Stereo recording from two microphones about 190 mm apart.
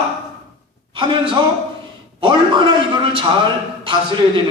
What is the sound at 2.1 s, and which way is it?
A man's voice, 25° right (ahead or behind).